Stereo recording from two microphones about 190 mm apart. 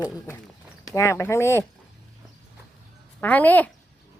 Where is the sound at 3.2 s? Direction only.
10° left (ahead or behind).